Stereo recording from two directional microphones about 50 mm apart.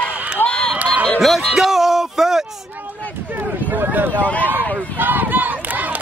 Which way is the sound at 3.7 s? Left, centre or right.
Right.